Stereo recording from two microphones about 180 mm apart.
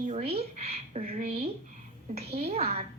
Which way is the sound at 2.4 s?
35° right (ahead or behind).